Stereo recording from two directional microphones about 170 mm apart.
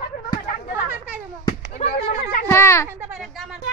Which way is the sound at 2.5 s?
15° left (ahead or behind).